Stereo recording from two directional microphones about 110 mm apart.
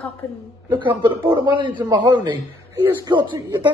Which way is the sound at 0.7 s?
50° right (ahead or behind).